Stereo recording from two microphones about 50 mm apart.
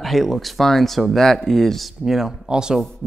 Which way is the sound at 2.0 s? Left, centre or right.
Centre.